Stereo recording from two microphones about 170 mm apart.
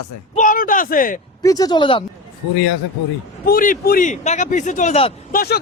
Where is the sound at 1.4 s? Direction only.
20° left (ahead or behind).